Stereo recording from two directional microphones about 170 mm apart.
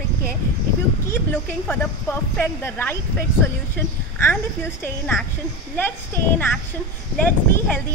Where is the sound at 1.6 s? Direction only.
10° left (ahead or behind).